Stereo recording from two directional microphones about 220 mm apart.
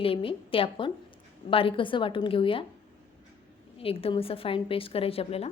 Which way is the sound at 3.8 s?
25° left (ahead or behind).